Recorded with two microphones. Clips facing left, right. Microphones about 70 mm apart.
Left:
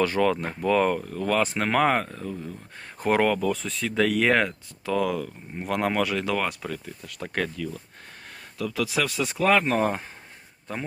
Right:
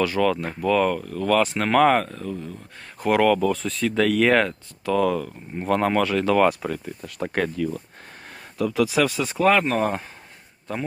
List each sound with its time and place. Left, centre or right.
0.2 s speech: left
5.1 s speech: centre
6.6 s speech: right
8.9 s speech: centre